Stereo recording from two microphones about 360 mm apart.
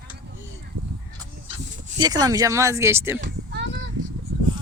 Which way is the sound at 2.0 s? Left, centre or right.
Centre.